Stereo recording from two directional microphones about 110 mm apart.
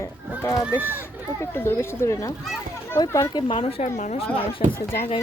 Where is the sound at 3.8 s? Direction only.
90° left.